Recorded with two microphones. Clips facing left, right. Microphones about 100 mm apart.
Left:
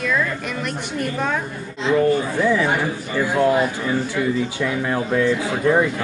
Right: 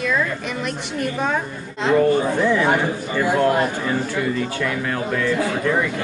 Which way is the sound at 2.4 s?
Centre (ahead or behind).